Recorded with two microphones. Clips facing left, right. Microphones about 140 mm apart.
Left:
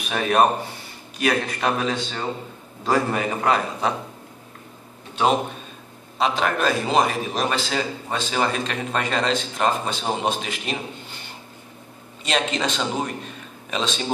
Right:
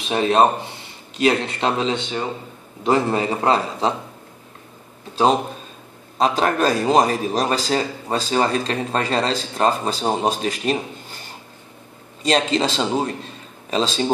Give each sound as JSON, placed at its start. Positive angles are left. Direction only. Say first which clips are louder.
{"t": 0.0, "sound": "speech", "louder": "right 3 dB", "side_deg": -25}
{"t": 5.1, "sound": "a man's voice", "louder": "right 3 dB", "side_deg": -35}
{"t": 12.2, "sound": "a man's voice", "louder": "right 5 dB", "side_deg": -35}